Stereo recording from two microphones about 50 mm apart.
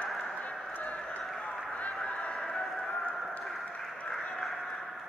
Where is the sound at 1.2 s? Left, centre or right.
Centre.